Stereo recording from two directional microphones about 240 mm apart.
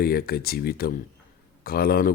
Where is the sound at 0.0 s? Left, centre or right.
Left.